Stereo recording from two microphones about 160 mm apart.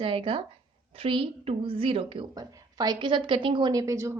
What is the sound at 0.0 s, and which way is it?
A woman's voice, 35° right (ahead or behind).